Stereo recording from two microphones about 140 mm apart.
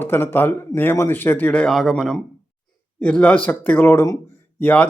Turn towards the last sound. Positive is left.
turn(degrees=10)  # may be behind; listen again after turning